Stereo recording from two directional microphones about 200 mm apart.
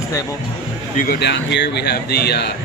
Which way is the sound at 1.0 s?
50° left (ahead or behind).